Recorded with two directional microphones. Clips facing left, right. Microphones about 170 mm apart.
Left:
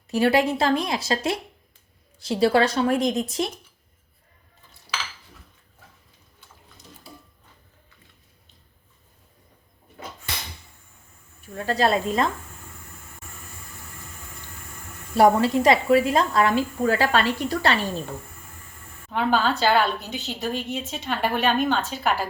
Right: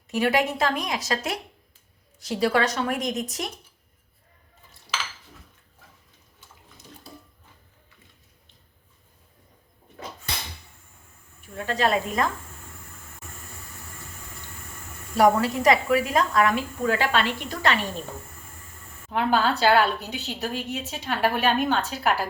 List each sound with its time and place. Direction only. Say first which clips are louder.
0.1 s a woman's voice: left 3 dB; 35° left (ahead or behind)
11.5 s a woman's voice: left 2 dB; 35° left (ahead or behind)
15.1 s a woman's voice: left 2 dB; 30° left (ahead or behind)
19.1 s a woman's voice: even; centre (ahead or behind)